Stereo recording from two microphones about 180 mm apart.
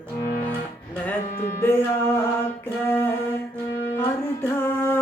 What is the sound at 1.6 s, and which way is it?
Music, 10° left (ahead or behind).